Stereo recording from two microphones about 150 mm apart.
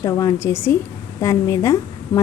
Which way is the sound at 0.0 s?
20° left (ahead or behind).